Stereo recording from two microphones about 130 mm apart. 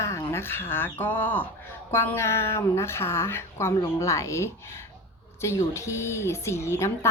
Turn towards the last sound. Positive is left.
turn(degrees=20)  # may be behind; listen again after turning